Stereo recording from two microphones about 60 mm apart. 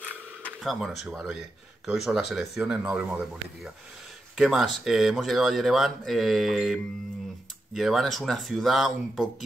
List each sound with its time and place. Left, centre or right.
0.7 s speech: centre
2.6 s speech: right
4.4 s speech: centre